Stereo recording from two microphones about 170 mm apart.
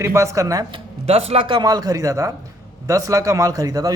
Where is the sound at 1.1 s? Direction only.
35° right (ahead or behind).